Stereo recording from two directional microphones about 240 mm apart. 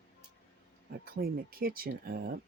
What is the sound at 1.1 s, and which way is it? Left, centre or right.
Speech, right.